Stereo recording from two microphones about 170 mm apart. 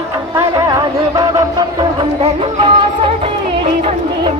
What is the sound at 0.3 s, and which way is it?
Music, 20° right (ahead or behind).